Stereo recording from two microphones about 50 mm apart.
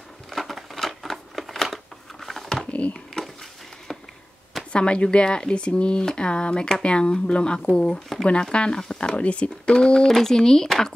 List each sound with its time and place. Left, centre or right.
0.3 s a sound: centre
2.6 s typing: left
4.7 s speech: left
10.0 s speech: centre